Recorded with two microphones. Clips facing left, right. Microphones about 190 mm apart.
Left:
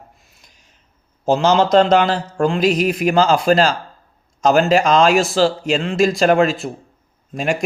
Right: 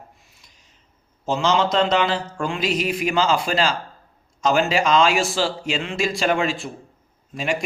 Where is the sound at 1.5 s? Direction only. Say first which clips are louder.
Left 6 dB; 45° left (ahead or behind).